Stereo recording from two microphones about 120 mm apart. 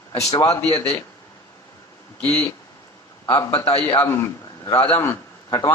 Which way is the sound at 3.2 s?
25° left (ahead or behind).